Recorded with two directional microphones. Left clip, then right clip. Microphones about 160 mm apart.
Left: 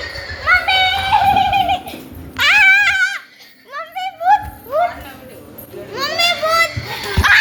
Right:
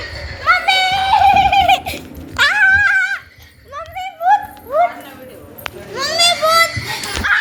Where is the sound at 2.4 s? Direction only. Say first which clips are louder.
Even; 45° right (ahead or behind).